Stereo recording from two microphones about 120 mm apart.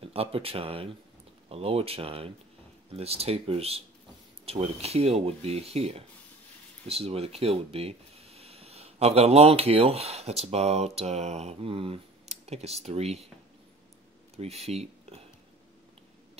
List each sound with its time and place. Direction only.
0.1 s speech: 55° right (ahead or behind)
14.3 s speech: 60° right (ahead or behind)